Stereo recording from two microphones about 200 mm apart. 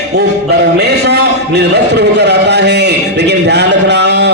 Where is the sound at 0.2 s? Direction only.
55° right (ahead or behind).